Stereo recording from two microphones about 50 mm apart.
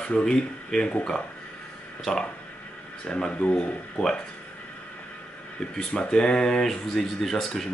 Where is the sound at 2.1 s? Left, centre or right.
Left.